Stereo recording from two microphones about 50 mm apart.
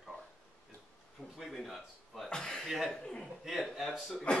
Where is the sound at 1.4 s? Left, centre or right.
Centre.